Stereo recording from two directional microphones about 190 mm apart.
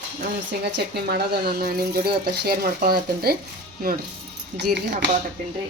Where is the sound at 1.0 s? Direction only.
55° right (ahead or behind).